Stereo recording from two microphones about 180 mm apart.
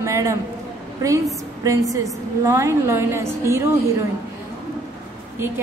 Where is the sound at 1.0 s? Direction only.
15° right (ahead or behind).